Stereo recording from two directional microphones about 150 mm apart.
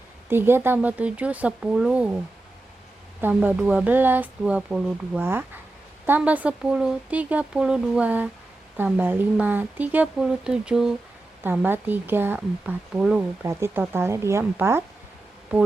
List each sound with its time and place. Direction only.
0.3 s a woman's voice: 15° right (ahead or behind)
3.2 s a woman's voice: 10° right (ahead or behind)